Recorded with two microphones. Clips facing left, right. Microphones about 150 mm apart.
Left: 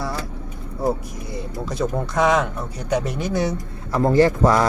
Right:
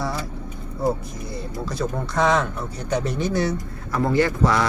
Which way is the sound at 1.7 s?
10° left (ahead or behind).